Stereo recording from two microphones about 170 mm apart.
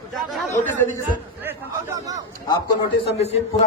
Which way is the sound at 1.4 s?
15° right (ahead or behind).